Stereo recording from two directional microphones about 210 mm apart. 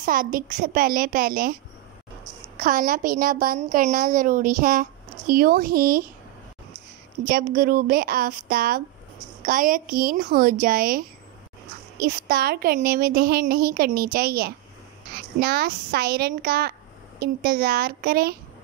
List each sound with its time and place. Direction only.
0.0 s a woman's voice: 40° right (ahead or behind)
2.6 s a woman's voice: 45° right (ahead or behind)
7.2 s a woman's voice: 45° right (ahead or behind)